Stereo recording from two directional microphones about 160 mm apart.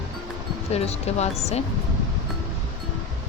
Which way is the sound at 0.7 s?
40° left (ahead or behind).